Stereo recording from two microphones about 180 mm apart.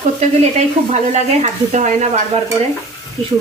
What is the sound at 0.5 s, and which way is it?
Speech, 40° right (ahead or behind).